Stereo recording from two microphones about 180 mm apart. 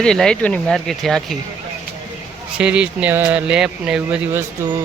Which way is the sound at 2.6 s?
5° right (ahead or behind).